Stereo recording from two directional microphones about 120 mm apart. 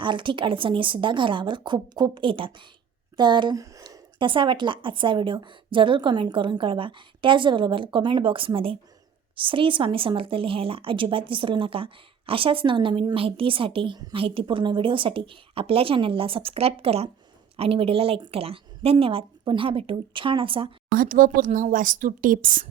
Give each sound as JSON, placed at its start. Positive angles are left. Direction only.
{"t": 0.0, "sound": "speech", "side_deg": -40}
{"t": 21.4, "sound": "a woman's voice", "side_deg": -90}